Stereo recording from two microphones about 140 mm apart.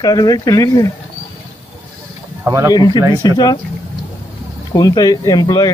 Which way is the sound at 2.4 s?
20° right (ahead or behind).